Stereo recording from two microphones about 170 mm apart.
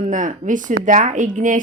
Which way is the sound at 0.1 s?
50° right (ahead or behind).